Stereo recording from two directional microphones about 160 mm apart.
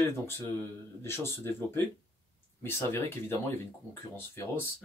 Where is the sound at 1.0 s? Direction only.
15° left (ahead or behind).